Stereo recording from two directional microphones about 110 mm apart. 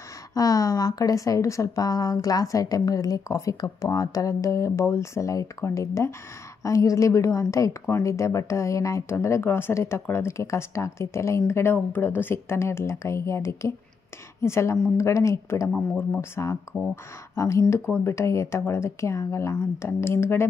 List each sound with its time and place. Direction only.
0.3 s speech: 35° left (ahead or behind)